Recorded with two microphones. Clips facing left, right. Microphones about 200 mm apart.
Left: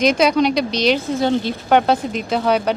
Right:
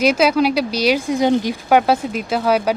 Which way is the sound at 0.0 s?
5° right (ahead or behind).